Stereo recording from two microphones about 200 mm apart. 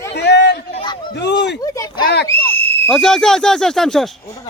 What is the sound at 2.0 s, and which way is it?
Whistle, 55° left (ahead or behind).